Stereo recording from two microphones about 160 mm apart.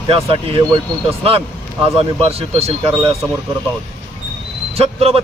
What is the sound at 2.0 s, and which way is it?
Speech, 40° right (ahead or behind).